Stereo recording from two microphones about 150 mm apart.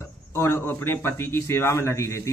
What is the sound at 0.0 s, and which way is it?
Speech, 15° left (ahead or behind).